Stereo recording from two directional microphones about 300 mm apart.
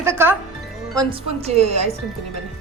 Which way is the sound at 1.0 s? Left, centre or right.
Centre.